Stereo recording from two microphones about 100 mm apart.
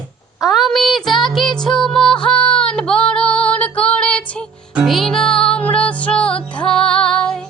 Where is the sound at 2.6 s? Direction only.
10° left (ahead or behind).